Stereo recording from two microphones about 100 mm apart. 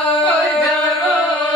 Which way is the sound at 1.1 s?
15° left (ahead or behind).